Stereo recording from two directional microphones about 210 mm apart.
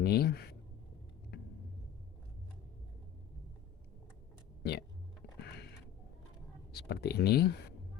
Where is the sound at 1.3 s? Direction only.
50° left (ahead or behind).